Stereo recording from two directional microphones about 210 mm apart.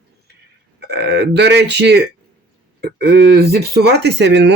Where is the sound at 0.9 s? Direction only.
50° right (ahead or behind).